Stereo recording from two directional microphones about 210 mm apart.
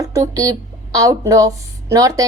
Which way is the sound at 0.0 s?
15° right (ahead or behind).